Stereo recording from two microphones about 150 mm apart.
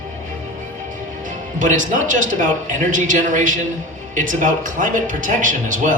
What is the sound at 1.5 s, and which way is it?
A man's voice, 60° right (ahead or behind).